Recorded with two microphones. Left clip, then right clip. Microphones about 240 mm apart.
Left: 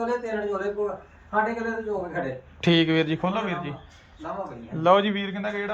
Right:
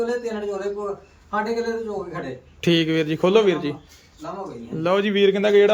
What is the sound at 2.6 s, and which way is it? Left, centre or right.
A man's voice, centre.